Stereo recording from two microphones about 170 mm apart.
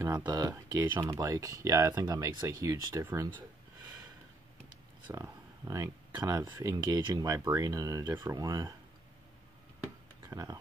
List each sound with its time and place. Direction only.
0.0 s speech: 20° right (ahead or behind)
5.1 s speech: 15° right (ahead or behind)
10.3 s speech: 20° right (ahead or behind)